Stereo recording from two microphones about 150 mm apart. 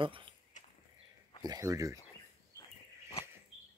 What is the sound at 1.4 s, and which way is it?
Speech, 25° right (ahead or behind).